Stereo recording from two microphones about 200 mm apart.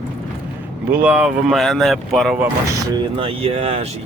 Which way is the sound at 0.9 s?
5° right (ahead or behind).